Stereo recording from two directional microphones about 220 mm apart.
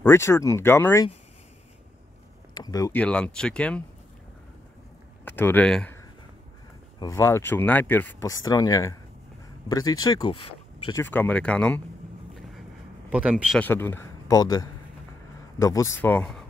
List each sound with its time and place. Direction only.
0.0 s speech: 10° left (ahead or behind)
2.5 s speech: 15° left (ahead or behind)
5.2 s speech: 10° left (ahead or behind)
7.0 s speech: 15° left (ahead or behind)
10.9 s speech: 10° left (ahead or behind)
13.1 s speech: 5° right (ahead or behind)
13.6 s speech: 10° left (ahead or behind)